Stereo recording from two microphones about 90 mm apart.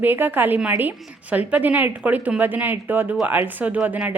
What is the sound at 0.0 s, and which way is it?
A woman's voice, 20° right (ahead or behind).